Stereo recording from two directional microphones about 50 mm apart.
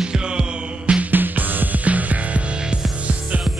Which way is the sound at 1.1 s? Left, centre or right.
Right.